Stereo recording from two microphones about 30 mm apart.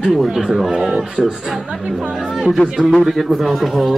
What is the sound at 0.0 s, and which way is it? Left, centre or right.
Speech, centre.